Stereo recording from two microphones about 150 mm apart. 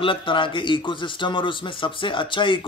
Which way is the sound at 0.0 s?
35° left (ahead or behind).